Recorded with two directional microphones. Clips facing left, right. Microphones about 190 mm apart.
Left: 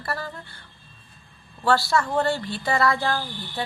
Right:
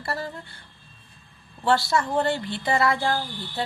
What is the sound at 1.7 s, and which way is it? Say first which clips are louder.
A woman's voice: left 1 dB; 20° right (ahead or behind).